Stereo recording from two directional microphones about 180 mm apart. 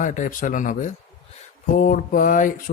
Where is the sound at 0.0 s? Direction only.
45° left (ahead or behind).